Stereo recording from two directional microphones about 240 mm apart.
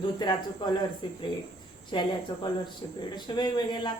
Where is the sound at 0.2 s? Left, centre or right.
Centre.